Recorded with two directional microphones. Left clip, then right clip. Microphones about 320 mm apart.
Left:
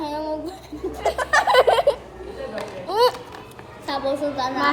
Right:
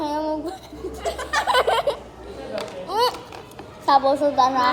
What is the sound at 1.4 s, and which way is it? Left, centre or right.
Giggle, centre.